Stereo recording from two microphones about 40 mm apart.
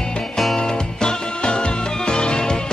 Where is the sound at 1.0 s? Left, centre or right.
Left.